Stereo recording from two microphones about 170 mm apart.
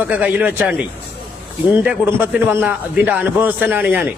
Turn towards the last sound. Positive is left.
turn(degrees=-10)  # may be behind; listen again after turning